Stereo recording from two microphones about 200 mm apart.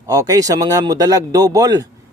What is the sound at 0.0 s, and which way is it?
A man's voice, 20° right (ahead or behind).